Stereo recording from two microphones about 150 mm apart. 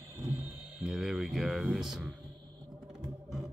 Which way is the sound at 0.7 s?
5° right (ahead or behind).